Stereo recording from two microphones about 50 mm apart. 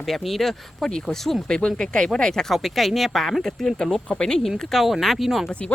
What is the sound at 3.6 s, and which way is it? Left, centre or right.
Speech, centre.